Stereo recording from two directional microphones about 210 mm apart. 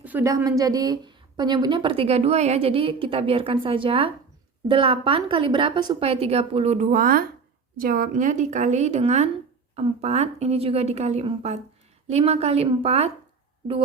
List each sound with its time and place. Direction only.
0.0 s a woman's voice: 10° right (ahead or behind); by 13.1 s 30° right (ahead or behind)